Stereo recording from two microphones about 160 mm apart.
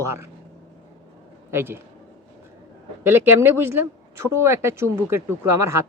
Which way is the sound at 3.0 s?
15° right (ahead or behind).